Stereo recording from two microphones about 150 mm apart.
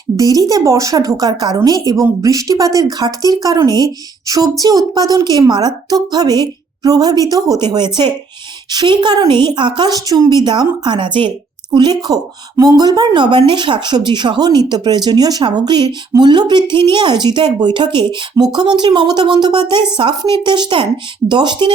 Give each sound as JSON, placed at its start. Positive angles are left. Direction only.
{"t": 0.2, "sound": "a woman's voice", "side_deg": -25}